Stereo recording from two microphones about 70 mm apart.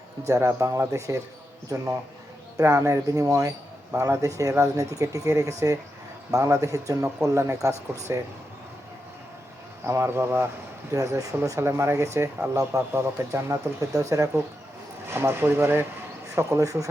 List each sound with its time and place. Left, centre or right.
0.3 s speech: right
9.8 s speech: right
10.9 s speech: right
15.0 s speech: right
16.6 s speech: right